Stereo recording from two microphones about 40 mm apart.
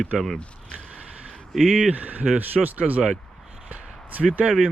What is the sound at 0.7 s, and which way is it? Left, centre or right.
Vehicle, centre.